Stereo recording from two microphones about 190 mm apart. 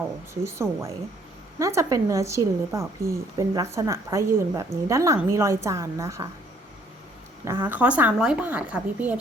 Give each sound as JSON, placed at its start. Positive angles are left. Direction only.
{"t": 0.4, "sound": "speech", "side_deg": -15}
{"t": 7.4, "sound": "speech", "side_deg": -10}